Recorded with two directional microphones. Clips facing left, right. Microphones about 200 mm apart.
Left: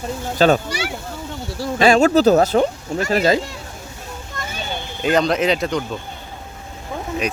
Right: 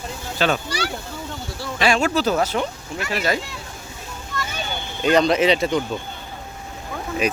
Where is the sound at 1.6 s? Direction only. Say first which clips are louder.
Left 6 dB; 40° left (ahead or behind).